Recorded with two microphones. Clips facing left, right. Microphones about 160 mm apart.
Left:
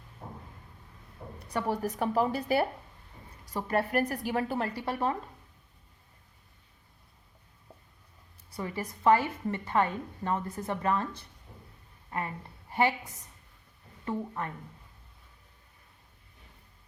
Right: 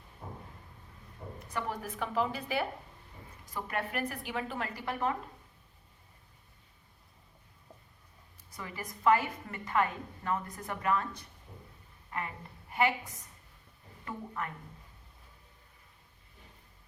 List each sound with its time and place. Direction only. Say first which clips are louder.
1.4 s speech: left 6 dB; 35° left (ahead or behind)
8.4 s a woman's voice: left 7 dB; 30° left (ahead or behind)
12.7 s a woman's voice: left 2 dB; 30° left (ahead or behind)